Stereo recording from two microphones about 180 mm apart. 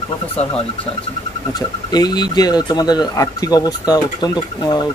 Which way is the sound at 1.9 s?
20° left (ahead or behind).